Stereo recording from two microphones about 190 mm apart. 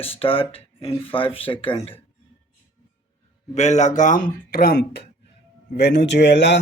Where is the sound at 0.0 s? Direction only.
30° left (ahead or behind).